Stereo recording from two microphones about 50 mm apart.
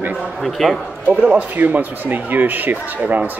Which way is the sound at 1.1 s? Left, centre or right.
Right.